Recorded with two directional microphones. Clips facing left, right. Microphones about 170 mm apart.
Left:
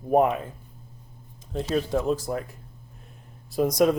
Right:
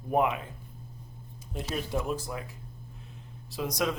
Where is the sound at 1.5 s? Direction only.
35° left (ahead or behind).